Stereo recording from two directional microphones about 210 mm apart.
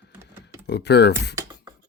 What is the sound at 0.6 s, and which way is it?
Speech, 50° left (ahead or behind).